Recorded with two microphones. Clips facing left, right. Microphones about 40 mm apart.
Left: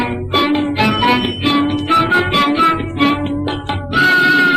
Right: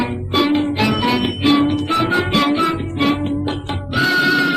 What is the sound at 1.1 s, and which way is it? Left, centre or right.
Music, centre.